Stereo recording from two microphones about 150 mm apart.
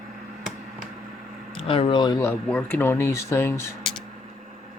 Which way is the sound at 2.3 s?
10° left (ahead or behind).